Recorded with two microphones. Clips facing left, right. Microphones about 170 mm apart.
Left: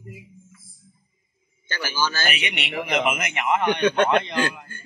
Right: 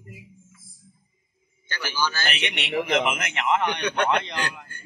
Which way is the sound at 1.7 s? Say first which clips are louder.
Left 1 dB; 40° left (ahead or behind).